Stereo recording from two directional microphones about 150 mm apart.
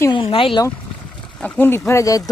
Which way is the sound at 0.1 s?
35° left (ahead or behind).